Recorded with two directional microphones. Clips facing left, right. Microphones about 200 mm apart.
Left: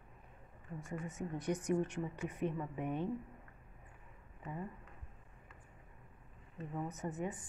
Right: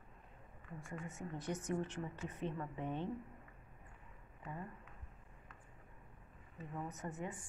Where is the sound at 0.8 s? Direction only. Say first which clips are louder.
Left 5 dB; 20° left (ahead or behind).